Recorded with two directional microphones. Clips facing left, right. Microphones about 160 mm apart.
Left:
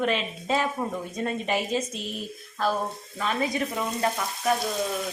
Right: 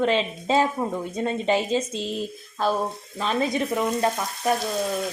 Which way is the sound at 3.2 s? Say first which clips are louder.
Right 3 dB; 25° right (ahead or behind).